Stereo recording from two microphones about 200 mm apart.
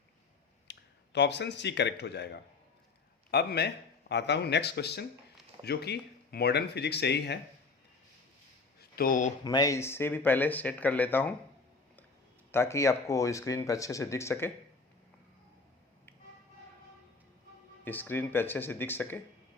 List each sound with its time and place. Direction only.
0.7 s speech: 60° left (ahead or behind)
8.8 s a sound: 45° left (ahead or behind)
9.4 s speech: 20° left (ahead or behind)
12.5 s speech: 10° left (ahead or behind)
17.8 s speech: 10° left (ahead or behind)